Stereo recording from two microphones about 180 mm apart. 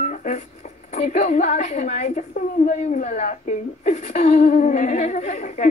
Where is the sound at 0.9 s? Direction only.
40° left (ahead or behind).